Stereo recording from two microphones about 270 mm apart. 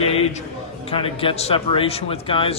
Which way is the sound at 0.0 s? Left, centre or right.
Left.